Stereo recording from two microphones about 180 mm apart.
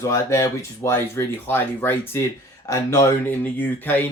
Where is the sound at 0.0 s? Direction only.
15° left (ahead or behind).